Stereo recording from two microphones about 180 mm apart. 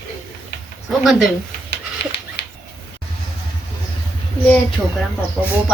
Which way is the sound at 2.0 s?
70° left (ahead or behind).